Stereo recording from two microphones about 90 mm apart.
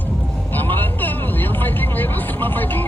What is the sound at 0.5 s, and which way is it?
Vehicle, 20° left (ahead or behind).